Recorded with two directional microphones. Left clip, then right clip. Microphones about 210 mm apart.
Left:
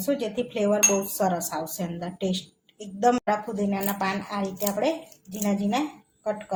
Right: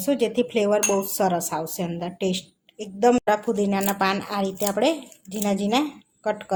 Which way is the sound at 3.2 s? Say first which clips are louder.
Right 4 dB; 35° right (ahead or behind).